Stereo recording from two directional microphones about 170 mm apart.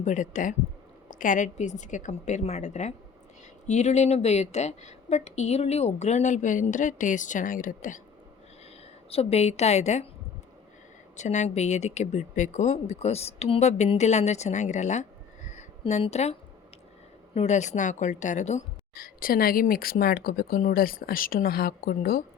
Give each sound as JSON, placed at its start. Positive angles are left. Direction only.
{"t": 0.0, "sound": "a woman's voice", "side_deg": 45}
{"t": 9.0, "sound": "speech", "side_deg": 35}
{"t": 11.2, "sound": "speech", "side_deg": 45}
{"t": 17.3, "sound": "a woman's voice", "side_deg": 40}
{"t": 18.9, "sound": "speech", "side_deg": 60}